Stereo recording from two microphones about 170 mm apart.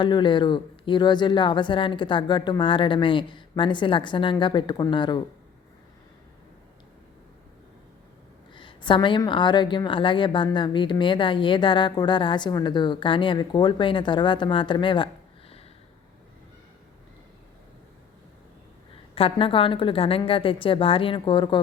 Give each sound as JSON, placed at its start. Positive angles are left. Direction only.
{"t": 0.0, "sound": "a woman's voice", "side_deg": 25}
{"t": 8.5, "sound": "a woman's voice", "side_deg": 30}
{"t": 19.1, "sound": "a woman's voice", "side_deg": 30}